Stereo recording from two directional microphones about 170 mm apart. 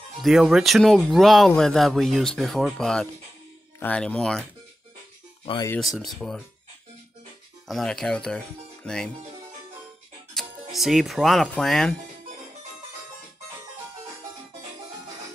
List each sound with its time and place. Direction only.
0.2 s speech: centre (ahead or behind)
5.4 s speech: 30° left (ahead or behind)
5.8 s speech: centre (ahead or behind)
7.6 s speech: centre (ahead or behind)
10.3 s speech: centre (ahead or behind)